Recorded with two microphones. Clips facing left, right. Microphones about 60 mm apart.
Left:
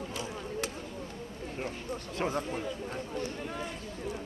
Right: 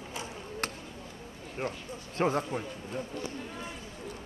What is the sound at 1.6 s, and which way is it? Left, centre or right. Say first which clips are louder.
Speech: right 3 dB; centre.